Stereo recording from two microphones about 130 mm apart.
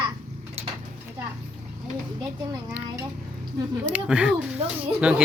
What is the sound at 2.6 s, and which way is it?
Speech, 15° right (ahead or behind).